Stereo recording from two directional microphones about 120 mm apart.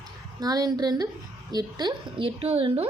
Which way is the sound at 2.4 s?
55° right (ahead or behind).